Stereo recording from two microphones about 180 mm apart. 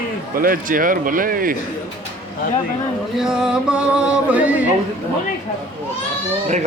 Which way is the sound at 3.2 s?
5° right (ahead or behind).